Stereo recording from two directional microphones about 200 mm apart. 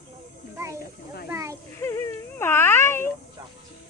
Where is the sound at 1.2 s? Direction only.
15° right (ahead or behind).